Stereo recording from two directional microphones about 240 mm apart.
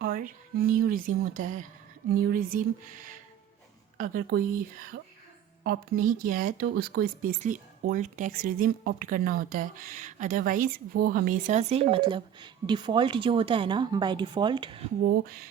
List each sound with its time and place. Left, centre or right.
0.0 s a sound: right
0.7 s a woman's voice: right
3.9 s a woman's voice: right
5.6 s a woman's voice: right; by 14.8 s centre
15.0 s a woman's voice: right